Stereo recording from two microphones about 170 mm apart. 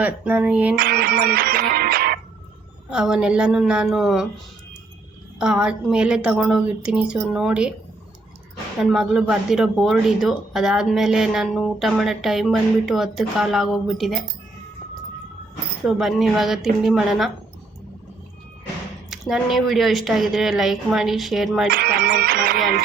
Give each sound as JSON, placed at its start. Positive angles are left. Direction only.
{"t": 0.0, "sound": "a sound", "side_deg": -10}
{"t": 0.8, "sound": "music", "side_deg": -70}
{"t": 2.9, "sound": "speech", "side_deg": -5}
{"t": 5.4, "sound": "speech", "side_deg": -5}
{"t": 8.8, "sound": "speech", "side_deg": 0}
{"t": 15.8, "sound": "speech", "side_deg": 0}
{"t": 19.1, "sound": "speech", "side_deg": 0}
{"t": 21.7, "sound": "music", "side_deg": -60}